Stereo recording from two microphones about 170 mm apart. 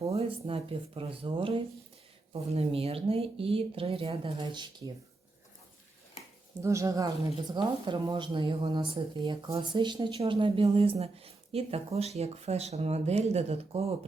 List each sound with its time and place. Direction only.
0.1 s speech: 35° right (ahead or behind)
6.6 s speech: 15° right (ahead or behind); by 14.1 s 35° right (ahead or behind)